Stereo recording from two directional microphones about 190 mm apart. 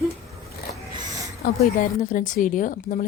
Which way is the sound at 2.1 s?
45° left (ahead or behind).